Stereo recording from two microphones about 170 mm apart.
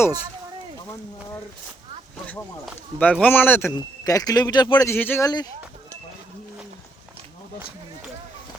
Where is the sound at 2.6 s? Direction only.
10° left (ahead or behind).